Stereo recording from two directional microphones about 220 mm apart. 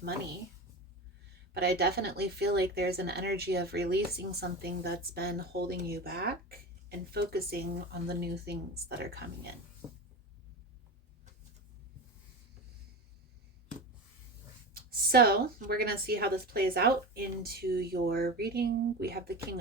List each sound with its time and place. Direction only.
1.5 s speech: 45° right (ahead or behind)
14.7 s speech: 45° right (ahead or behind)